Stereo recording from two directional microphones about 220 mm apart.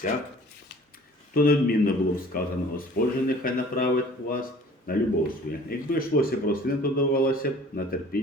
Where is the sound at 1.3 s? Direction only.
40° left (ahead or behind).